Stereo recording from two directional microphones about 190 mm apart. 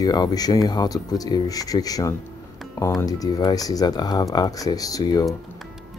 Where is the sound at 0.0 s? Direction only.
20° left (ahead or behind).